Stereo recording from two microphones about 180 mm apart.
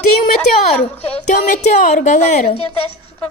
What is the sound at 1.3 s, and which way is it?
Speech, 40° left (ahead or behind).